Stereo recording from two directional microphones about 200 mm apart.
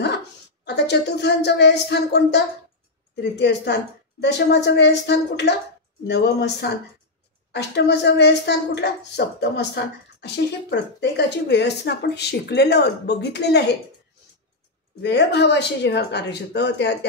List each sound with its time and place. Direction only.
0.7 s speech: 55° left (ahead or behind)
15.0 s speech: 60° left (ahead or behind)